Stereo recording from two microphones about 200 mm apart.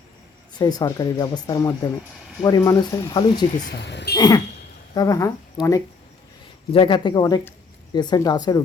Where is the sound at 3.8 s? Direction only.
60° left (ahead or behind).